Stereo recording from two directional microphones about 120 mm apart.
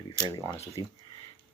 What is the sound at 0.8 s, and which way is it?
Speech, 30° right (ahead or behind).